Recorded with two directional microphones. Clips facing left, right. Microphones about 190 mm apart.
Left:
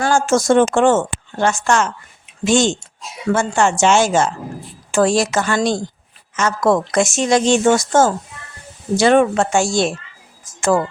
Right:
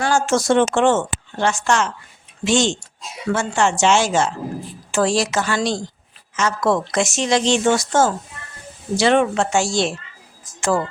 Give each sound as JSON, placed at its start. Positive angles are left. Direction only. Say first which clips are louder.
{"t": 0.0, "sound": "speech", "louder": "left 3 dB", "side_deg": 45}